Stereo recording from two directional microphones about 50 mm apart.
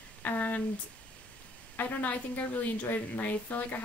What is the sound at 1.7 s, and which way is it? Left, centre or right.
A woman's voice, left.